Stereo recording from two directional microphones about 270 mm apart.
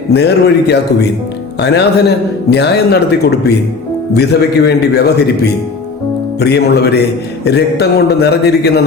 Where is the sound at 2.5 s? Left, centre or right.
Left.